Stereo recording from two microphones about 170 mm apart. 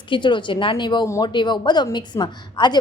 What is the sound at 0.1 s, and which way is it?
A woman's voice, 25° left (ahead or behind).